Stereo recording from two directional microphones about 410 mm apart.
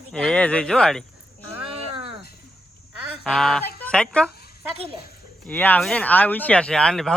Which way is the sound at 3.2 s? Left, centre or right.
Centre.